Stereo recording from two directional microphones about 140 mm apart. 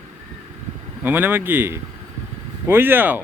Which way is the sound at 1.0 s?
15° right (ahead or behind).